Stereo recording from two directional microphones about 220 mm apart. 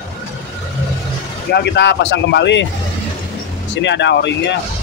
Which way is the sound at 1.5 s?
50° left (ahead or behind).